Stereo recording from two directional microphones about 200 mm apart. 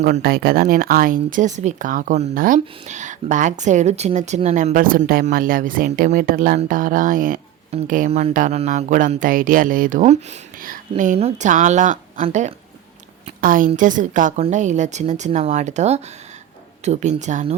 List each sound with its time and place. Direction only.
0.1 s a woman's voice: 50° right (ahead or behind)